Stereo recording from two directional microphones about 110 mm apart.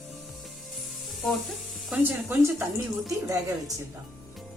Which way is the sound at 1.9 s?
15° right (ahead or behind).